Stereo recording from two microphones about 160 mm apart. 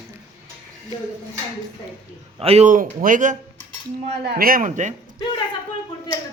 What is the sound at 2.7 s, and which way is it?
Speech, 55° right (ahead or behind).